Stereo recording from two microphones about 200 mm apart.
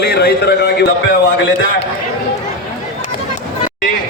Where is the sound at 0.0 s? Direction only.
55° left (ahead or behind).